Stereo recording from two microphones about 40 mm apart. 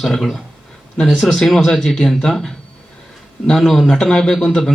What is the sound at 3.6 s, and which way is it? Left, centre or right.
Speech, centre.